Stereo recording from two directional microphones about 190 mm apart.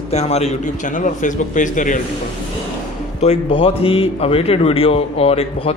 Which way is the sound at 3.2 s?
30° left (ahead or behind).